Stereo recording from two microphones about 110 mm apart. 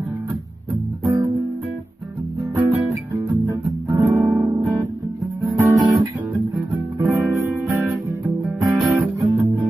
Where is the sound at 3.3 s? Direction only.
30° right (ahead or behind).